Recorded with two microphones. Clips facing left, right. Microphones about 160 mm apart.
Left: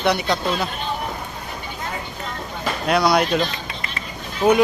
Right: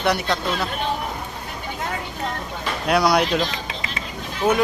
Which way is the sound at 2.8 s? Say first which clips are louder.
Even; 5° right (ahead or behind).